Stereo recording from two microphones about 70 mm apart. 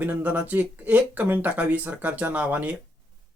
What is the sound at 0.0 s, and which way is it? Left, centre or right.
Speech, right.